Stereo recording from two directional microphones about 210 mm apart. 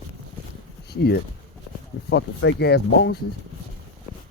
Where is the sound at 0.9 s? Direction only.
50° left (ahead or behind).